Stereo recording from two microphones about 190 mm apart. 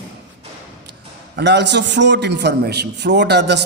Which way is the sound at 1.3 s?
65° right (ahead or behind).